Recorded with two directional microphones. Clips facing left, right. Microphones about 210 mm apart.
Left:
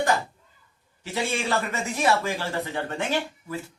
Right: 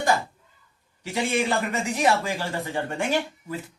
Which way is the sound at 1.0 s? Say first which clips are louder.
Right 3 dB; 15° right (ahead or behind).